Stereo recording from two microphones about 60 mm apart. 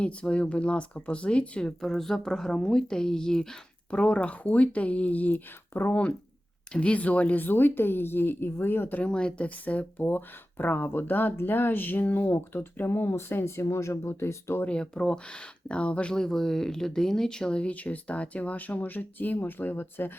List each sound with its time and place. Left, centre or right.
0.0 s speech: centre
1.8 s speech: centre; by 9.0 s left
9.0 s speech: centre; by 14.6 s left
14.7 s speech: centre
16.2 s speech: centre; by 20.1 s left